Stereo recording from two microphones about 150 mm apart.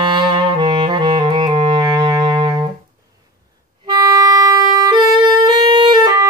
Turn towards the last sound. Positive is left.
turn(degrees=-30)  # may be behind; listen again after turning